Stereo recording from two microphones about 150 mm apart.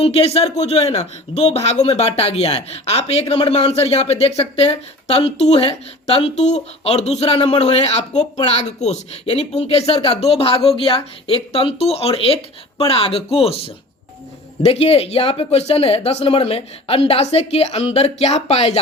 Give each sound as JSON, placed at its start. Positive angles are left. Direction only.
{"t": 0.0, "sound": "speech", "side_deg": 40}